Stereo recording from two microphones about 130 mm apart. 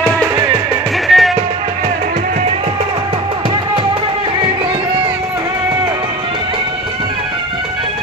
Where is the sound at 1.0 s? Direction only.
Centre (ahead or behind).